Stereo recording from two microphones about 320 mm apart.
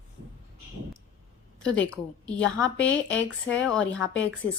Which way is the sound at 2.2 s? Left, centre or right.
Centre.